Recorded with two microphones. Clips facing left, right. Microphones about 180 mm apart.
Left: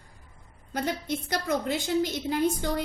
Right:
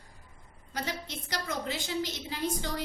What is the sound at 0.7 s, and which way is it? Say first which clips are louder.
A woman's voice: left 7 dB; 55° left (ahead or behind).